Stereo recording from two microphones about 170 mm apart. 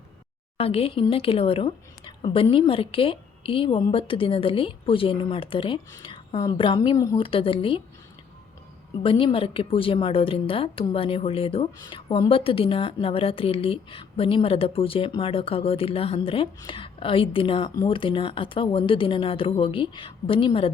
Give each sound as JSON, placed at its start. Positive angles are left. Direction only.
{"t": 0.5, "sound": "a woman's voice", "side_deg": 35}
{"t": 7.2, "sound": "a woman's voice", "side_deg": 30}
{"t": 9.0, "sound": "a woman's voice", "side_deg": 30}